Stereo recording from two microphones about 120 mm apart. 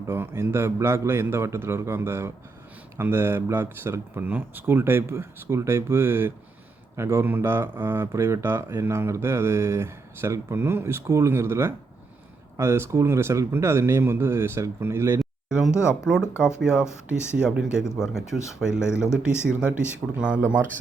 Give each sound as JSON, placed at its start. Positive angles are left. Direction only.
{"t": 0.1, "sound": "speech", "side_deg": -20}
{"t": 15.2, "sound": "a sound", "side_deg": -5}
{"t": 16.6, "sound": "speech", "side_deg": -5}
{"t": 18.9, "sound": "speech", "side_deg": 20}
{"t": 19.5, "sound": "speech", "side_deg": -10}